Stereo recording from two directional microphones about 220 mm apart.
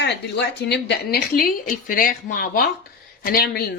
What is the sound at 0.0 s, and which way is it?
Speech, 50° left (ahead or behind).